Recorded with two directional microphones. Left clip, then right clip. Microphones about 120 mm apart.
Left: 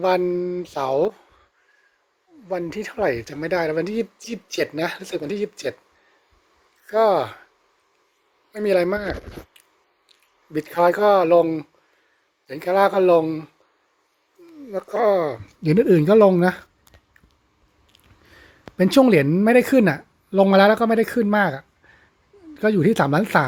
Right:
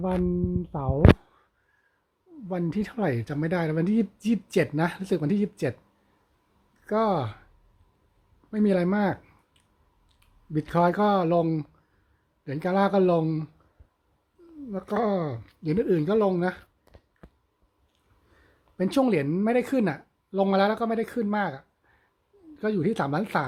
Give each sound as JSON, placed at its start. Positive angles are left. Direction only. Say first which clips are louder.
{"t": 0.8, "sound": "speech", "louder": "left 10 dB", "side_deg": 40}
{"t": 2.5, "sound": "speech", "louder": "left 5 dB", "side_deg": 15}
{"t": 6.8, "sound": "speech", "louder": "left 7 dB", "side_deg": 30}
{"t": 8.5, "sound": "speech", "louder": "left 6 dB", "side_deg": 35}
{"t": 10.1, "sound": "speech", "louder": "left 4 dB", "side_deg": 30}
{"t": 12.5, "sound": "speech", "louder": "left 6 dB", "side_deg": 35}
{"t": 14.7, "sound": "speech", "louder": "left 8 dB", "side_deg": 35}
{"t": 18.8, "sound": "speech", "louder": "left 9 dB", "side_deg": 35}